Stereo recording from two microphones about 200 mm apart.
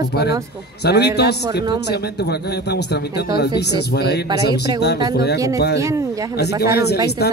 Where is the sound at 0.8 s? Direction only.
55° left (ahead or behind).